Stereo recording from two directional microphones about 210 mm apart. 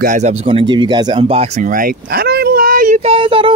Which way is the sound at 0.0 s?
35° right (ahead or behind).